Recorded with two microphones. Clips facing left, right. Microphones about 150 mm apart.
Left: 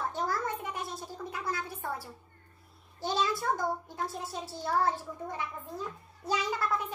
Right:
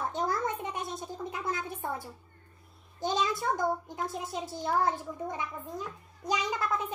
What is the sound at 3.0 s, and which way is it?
A child's voice, 20° right (ahead or behind).